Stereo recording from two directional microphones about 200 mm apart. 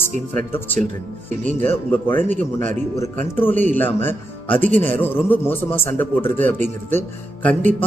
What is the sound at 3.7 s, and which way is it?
A man's voice, 10° left (ahead or behind).